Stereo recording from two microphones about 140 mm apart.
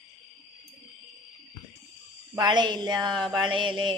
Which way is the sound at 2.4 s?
35° right (ahead or behind).